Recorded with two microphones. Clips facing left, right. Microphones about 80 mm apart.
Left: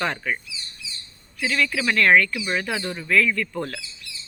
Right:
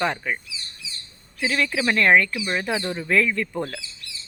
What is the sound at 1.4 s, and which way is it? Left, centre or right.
Speech, right.